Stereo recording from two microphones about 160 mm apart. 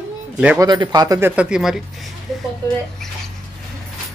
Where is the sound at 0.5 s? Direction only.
25° right (ahead or behind).